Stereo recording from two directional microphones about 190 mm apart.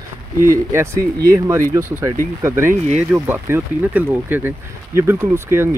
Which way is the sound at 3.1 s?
10° right (ahead or behind).